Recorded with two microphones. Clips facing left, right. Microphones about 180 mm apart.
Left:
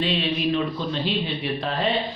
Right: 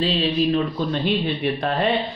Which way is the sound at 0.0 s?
35° right (ahead or behind).